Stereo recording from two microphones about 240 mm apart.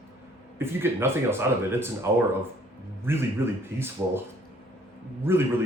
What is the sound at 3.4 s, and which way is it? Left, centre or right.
Speech, centre.